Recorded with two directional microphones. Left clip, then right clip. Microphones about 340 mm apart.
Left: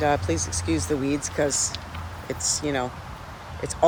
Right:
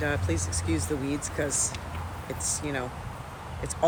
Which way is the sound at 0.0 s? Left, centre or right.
Centre.